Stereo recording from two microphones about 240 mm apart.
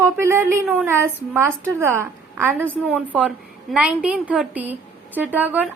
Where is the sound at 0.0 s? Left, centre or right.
Centre.